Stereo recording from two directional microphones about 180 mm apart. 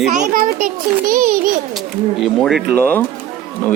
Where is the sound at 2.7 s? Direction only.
10° left (ahead or behind).